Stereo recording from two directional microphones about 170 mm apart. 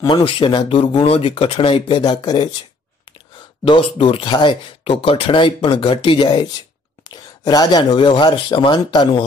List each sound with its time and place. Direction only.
0.0 s speech: 30° left (ahead or behind)
3.6 s speech: 30° left (ahead or behind)